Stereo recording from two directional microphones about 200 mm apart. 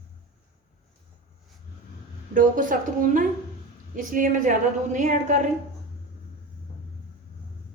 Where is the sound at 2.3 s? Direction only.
40° right (ahead or behind).